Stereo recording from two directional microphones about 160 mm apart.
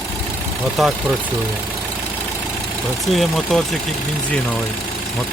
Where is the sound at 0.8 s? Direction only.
Centre (ahead or behind).